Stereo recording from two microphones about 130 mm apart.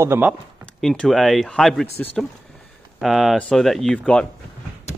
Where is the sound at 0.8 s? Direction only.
5° left (ahead or behind).